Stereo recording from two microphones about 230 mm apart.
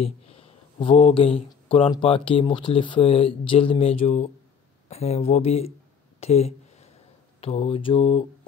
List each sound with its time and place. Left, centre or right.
0.0 s speech: left